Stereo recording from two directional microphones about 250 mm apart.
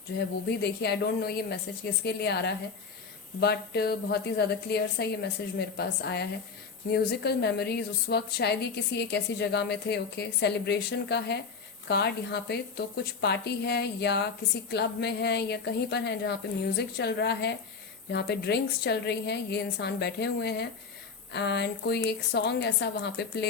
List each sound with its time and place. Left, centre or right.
0.2 s a woman's voice: left